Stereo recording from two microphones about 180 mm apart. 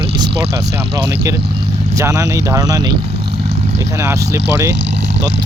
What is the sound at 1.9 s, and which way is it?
Speech, 15° right (ahead or behind).